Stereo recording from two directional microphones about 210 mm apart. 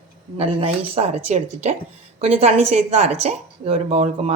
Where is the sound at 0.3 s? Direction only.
25° right (ahead or behind).